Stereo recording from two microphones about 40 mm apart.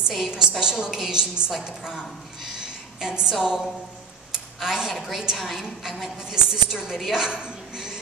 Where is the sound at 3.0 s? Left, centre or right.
Centre.